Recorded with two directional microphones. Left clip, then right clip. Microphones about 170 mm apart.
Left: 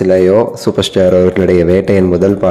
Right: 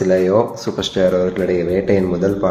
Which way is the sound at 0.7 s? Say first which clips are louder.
Left 6 dB; 55° left (ahead or behind).